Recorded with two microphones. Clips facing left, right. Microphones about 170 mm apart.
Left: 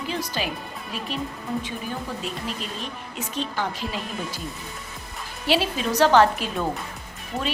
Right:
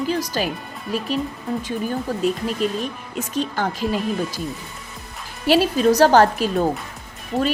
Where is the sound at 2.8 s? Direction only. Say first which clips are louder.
Right 6 dB; 45° right (ahead or behind).